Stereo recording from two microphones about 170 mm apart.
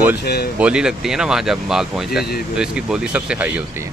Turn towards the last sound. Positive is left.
turn(degrees=-5)  # may be behind; listen again after turning